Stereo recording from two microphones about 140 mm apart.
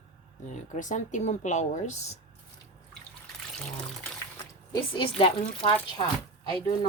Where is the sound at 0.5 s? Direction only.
65° left (ahead or behind).